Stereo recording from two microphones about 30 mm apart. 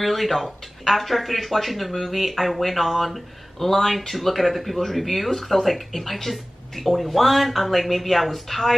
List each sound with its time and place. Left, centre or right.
0.0 s speech: centre